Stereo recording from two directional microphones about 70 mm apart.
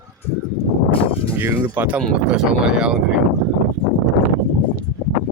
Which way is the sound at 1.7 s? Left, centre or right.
Right.